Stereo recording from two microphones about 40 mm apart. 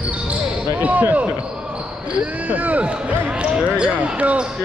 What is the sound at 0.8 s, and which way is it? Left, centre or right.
Speech, right.